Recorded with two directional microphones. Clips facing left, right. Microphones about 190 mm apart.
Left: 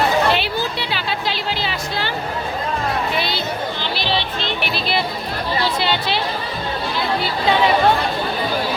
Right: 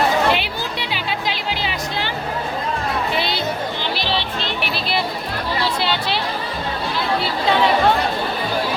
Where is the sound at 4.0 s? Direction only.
40° right (ahead or behind).